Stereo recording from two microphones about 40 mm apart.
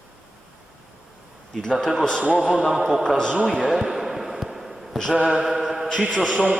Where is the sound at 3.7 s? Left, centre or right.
Centre.